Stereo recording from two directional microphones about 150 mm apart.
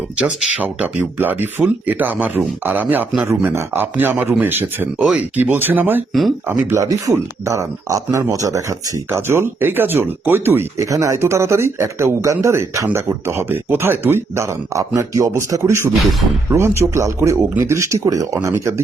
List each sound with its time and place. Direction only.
0.2 s speech: 5° right (ahead or behind)
6.1 s speech: centre (ahead or behind)
6.7 s speech: 20° right (ahead or behind)